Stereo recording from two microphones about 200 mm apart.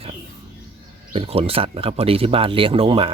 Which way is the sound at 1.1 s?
30° right (ahead or behind).